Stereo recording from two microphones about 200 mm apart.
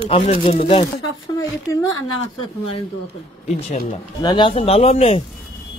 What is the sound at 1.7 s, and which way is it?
Speech, 15° left (ahead or behind).